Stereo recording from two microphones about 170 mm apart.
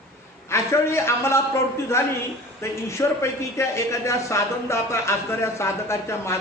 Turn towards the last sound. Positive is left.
turn(degrees=15)  # may be behind; listen again after turning